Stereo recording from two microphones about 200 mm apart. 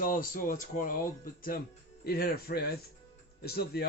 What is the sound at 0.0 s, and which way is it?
A man's voice, 45° left (ahead or behind).